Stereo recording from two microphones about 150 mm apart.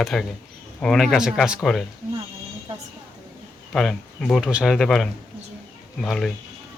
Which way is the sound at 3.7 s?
5° left (ahead or behind).